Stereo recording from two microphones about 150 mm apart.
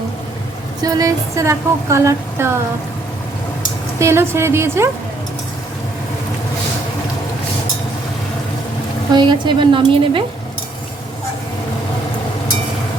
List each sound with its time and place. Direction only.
0.8 s a sound: 25° right (ahead or behind)
4.0 s a woman's voice: 15° right (ahead or behind)
9.1 s a woman's voice: 30° right (ahead or behind)